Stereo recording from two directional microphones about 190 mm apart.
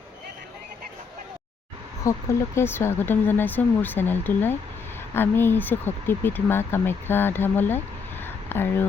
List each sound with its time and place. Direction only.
2.0 s speech: 15° left (ahead or behind)